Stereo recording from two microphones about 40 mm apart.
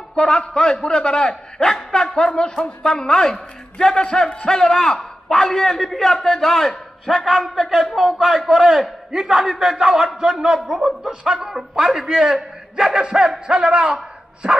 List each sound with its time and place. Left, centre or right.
0.1 s a man's voice: centre
11.3 s a man's voice: centre
13.1 s music: centre